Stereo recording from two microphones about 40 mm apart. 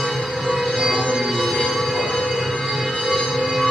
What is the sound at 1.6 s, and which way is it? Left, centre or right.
Music, centre.